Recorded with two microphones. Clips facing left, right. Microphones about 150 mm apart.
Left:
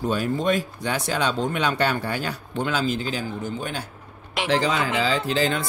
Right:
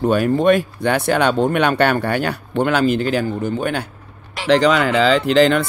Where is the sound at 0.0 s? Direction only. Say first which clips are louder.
Right 8 dB; 65° right (ahead or behind).